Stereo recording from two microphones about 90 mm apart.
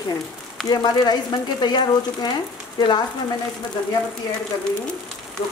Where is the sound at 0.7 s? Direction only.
45° left (ahead or behind).